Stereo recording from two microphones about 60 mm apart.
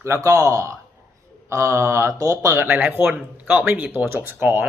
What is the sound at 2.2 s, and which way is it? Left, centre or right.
Speech, right.